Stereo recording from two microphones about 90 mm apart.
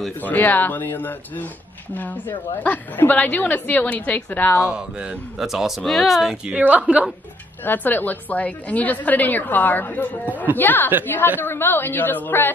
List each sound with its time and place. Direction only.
0.2 s a woman's voice: 20° left (ahead or behind)
4.6 s speech: 10° right (ahead or behind)
7.6 s a woman's voice: 20° left (ahead or behind)